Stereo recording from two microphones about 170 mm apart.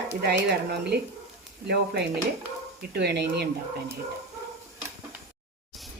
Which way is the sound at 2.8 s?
80° right.